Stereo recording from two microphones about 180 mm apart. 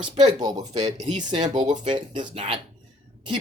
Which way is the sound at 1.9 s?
25° right (ahead or behind).